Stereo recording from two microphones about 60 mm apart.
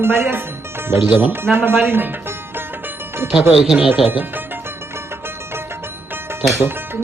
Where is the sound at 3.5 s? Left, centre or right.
Centre.